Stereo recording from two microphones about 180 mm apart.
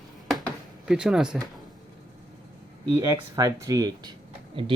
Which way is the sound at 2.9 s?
20° right (ahead or behind).